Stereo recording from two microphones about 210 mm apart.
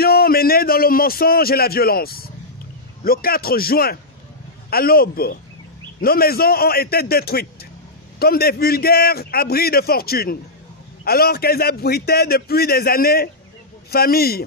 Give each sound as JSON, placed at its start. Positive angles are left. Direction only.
{"t": 0.0, "sound": "a man's voice", "side_deg": 45}